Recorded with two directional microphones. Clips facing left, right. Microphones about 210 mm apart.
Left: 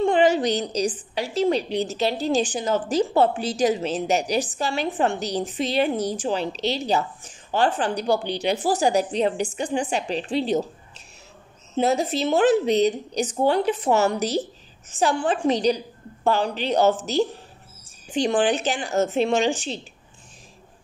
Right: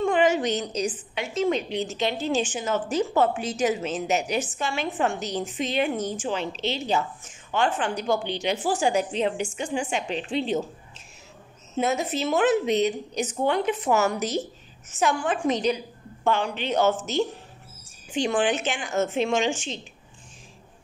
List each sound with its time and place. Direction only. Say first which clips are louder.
0.0 s a woman's voice: left 3 dB; 35° left (ahead or behind)
11.7 s a woman's voice: left 4 dB; 35° left (ahead or behind)